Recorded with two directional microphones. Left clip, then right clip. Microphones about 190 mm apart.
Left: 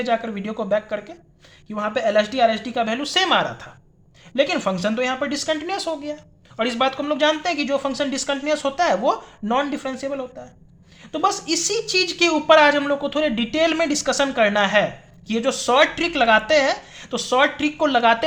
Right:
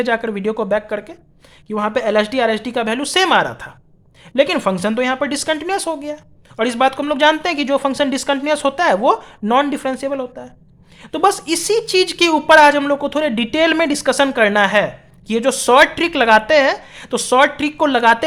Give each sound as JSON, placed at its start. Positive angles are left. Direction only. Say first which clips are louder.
{"t": 0.0, "sound": "speech", "louder": "right 5 dB", "side_deg": -45}